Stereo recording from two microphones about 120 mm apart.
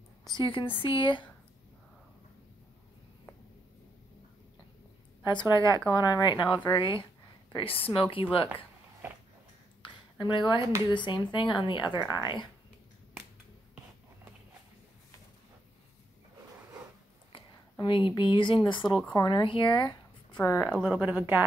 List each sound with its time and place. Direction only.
0.4 s speech: 45° left (ahead or behind)
5.2 s speech: 40° left (ahead or behind)
9.8 s a sound: 40° left (ahead or behind)
10.9 s speech: 40° left (ahead or behind)
17.3 s a woman's voice: 45° left (ahead or behind)
20.6 s speech: 15° right (ahead or behind)